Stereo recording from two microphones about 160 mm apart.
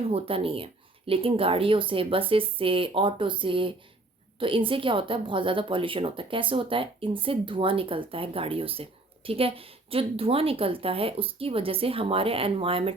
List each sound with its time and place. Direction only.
0.1 s a woman's voice: 35° right (ahead or behind)